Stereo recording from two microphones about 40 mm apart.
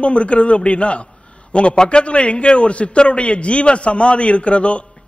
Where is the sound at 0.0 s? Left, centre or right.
Left.